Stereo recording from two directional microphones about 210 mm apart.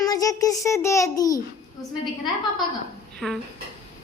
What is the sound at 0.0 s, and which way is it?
A child's voice, 15° left (ahead or behind).